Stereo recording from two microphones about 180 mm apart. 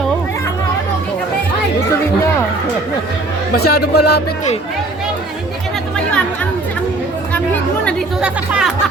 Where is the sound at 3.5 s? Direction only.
60° left (ahead or behind).